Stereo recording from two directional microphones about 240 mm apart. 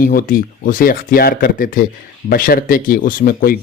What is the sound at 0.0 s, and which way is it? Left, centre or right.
Speech, left.